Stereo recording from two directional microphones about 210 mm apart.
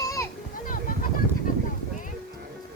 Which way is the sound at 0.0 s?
15° left (ahead or behind).